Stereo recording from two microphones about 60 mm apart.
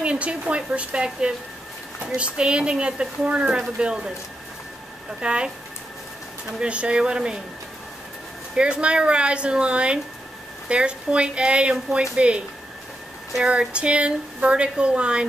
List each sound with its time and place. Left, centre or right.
0.0 s speech: centre
5.2 s speech: centre
6.6 s speech: centre
8.5 s speech: centre